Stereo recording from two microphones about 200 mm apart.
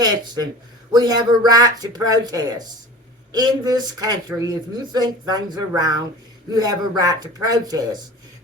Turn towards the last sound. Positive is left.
turn(degrees=-20)  # may be behind; listen again after turning